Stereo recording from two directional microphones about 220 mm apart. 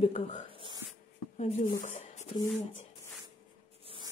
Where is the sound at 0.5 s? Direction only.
25° right (ahead or behind).